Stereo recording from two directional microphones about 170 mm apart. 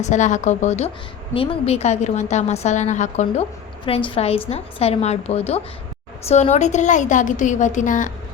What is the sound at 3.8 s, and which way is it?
A woman's voice, 30° left (ahead or behind).